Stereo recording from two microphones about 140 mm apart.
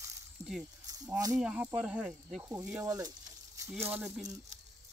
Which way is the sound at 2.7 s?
25° right (ahead or behind).